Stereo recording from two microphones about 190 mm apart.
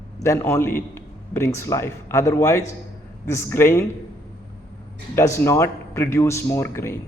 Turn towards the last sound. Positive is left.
turn(degrees=15)  # may be behind; listen again after turning